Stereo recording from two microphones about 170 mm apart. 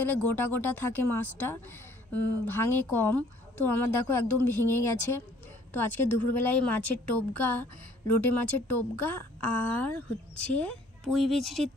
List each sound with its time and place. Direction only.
0.0 s speech: 10° left (ahead or behind)